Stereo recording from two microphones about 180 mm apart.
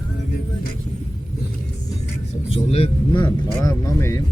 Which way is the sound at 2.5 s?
35° left (ahead or behind).